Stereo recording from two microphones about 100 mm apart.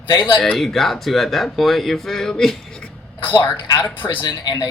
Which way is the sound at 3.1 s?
55° left (ahead or behind).